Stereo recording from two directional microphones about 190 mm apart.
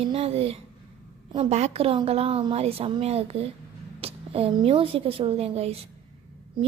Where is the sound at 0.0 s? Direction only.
30° right (ahead or behind).